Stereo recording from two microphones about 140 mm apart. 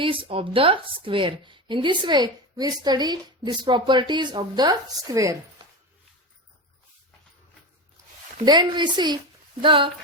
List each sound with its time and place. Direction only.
0.0 s a woman's voice: 40° right (ahead or behind); by 5.4 s 25° right (ahead or behind)
8.4 s a woman's voice: 30° right (ahead or behind)